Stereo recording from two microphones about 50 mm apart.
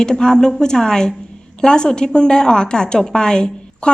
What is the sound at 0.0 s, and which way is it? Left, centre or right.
A woman's voice, centre.